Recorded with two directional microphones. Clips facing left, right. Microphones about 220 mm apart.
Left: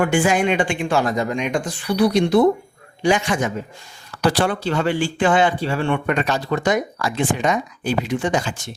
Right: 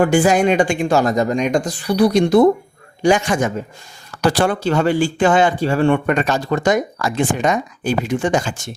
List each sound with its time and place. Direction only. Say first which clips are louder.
0.0 s speech: right 4 dB; 40° right (ahead or behind)